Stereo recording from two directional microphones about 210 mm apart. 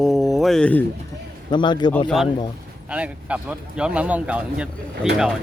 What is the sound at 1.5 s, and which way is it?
Speech, 20° left (ahead or behind).